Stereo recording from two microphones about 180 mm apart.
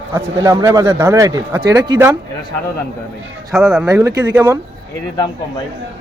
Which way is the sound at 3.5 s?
Centre (ahead or behind).